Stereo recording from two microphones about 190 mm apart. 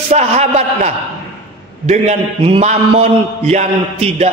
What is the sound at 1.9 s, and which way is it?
A man's voice, 35° right (ahead or behind).